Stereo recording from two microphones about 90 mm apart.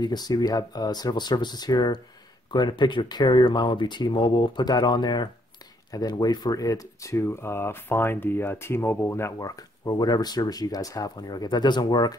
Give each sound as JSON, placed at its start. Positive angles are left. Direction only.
{"t": 0.0, "sound": "speech", "side_deg": 50}